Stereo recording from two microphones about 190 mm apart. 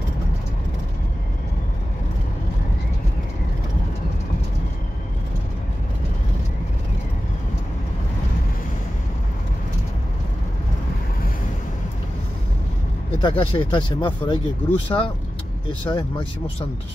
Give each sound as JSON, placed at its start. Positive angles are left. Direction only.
{"t": 13.2, "sound": "speech", "side_deg": 30}